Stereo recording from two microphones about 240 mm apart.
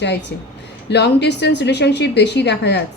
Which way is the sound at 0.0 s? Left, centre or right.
Left.